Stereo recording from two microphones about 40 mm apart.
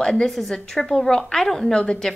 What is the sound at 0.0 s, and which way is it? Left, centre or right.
A woman's voice, centre.